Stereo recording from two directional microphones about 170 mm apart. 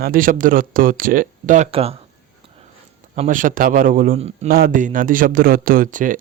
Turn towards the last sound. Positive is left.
turn(degrees=-50)  # may be behind; listen again after turning